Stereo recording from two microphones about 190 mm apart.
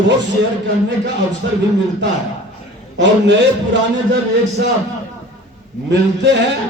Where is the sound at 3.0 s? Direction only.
70° right (ahead or behind).